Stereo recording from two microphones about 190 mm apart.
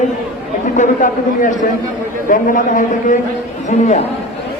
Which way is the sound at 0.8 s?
45° left (ahead or behind).